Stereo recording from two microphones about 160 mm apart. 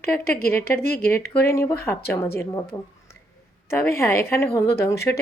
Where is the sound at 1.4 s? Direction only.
15° left (ahead or behind).